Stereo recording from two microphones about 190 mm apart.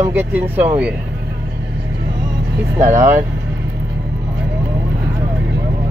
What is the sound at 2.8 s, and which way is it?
Speech, 15° right (ahead or behind).